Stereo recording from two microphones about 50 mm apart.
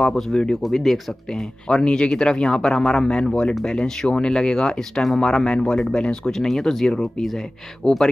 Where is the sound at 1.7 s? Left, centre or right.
Centre.